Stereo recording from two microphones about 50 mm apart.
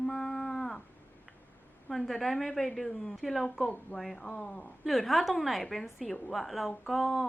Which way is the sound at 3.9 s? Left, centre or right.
Centre.